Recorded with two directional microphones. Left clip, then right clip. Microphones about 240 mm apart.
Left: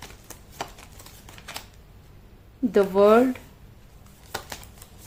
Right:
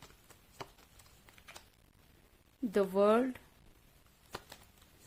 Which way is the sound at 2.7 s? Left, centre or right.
Right.